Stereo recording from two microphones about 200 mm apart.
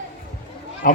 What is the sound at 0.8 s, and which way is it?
Speech, 45° left (ahead or behind).